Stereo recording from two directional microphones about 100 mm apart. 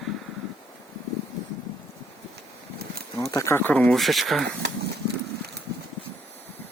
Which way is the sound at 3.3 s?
30° left (ahead or behind).